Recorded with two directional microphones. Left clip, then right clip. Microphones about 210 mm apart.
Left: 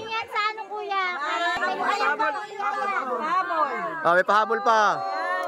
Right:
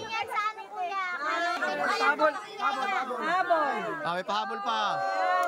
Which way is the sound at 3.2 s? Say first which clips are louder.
Left 1 dB; 15° right (ahead or behind).